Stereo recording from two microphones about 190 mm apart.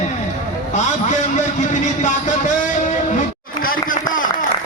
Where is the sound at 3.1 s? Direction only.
45° left (ahead or behind).